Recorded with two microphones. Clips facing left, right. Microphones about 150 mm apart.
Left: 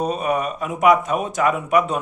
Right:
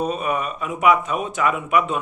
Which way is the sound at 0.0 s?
40° left (ahead or behind).